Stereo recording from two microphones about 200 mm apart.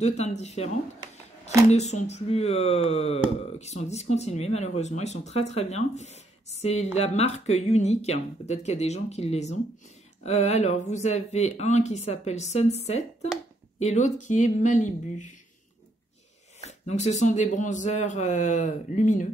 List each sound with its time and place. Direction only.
0.0 s speech: 35° left (ahead or behind)
1.7 s speech: 35° left (ahead or behind)
16.6 s speech: 35° left (ahead or behind)